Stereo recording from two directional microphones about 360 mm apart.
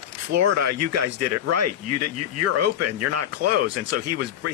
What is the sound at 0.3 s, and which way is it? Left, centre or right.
Speech, right.